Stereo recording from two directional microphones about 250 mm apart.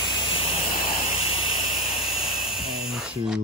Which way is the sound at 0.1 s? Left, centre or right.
Left.